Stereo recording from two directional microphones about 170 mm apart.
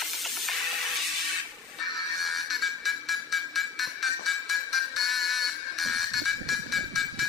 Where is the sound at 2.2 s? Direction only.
Centre (ahead or behind).